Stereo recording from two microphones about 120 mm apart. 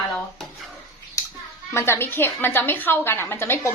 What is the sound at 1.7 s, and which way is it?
A woman's voice, 20° left (ahead or behind).